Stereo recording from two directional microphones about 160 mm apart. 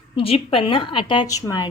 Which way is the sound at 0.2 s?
35° left (ahead or behind).